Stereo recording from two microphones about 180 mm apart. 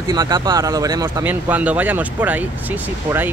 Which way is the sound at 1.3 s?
10° right (ahead or behind).